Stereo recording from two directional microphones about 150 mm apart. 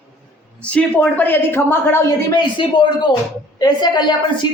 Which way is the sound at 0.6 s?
10° left (ahead or behind).